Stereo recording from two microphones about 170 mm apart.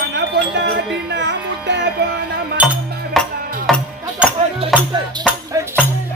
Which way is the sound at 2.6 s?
5° right (ahead or behind).